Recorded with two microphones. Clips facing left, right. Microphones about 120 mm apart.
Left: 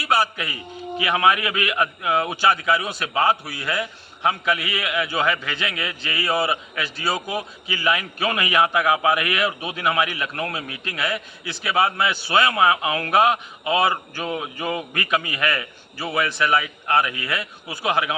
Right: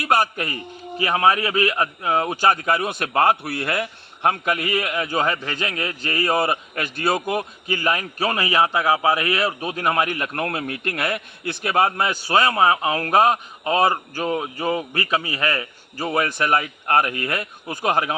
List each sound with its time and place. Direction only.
0.0 s a man's voice: 50° right (ahead or behind)